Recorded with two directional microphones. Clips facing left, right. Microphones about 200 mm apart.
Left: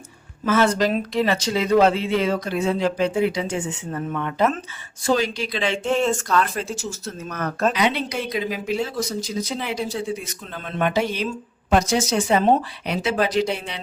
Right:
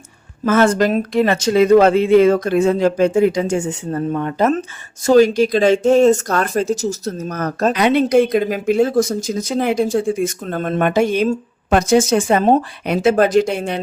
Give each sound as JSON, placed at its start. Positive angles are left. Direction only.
{"t": 0.4, "sound": "speech", "side_deg": -50}